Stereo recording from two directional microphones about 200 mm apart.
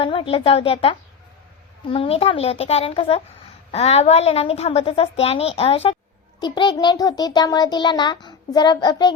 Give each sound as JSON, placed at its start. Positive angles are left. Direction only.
{"t": 0.0, "sound": "a child's voice", "side_deg": 25}